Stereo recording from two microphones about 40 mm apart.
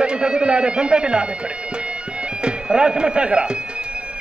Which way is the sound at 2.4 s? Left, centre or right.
Right.